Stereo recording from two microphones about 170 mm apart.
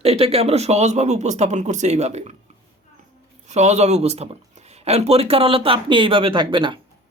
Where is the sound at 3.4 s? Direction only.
40° right (ahead or behind).